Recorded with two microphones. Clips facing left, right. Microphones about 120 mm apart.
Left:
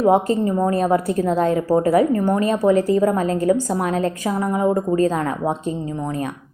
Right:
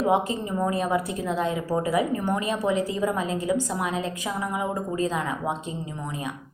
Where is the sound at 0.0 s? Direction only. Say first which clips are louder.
Left 7 dB; 45° left (ahead or behind).